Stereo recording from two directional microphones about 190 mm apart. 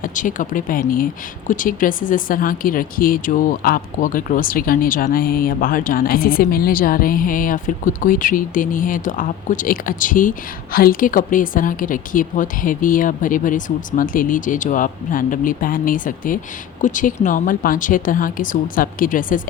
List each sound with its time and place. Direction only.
0.0 s speech: 45° left (ahead or behind)